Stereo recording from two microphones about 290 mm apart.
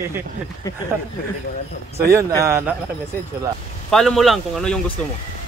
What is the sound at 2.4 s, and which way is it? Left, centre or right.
Speech, centre.